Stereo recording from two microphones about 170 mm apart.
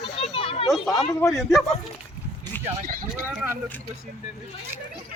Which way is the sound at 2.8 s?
55° right (ahead or behind).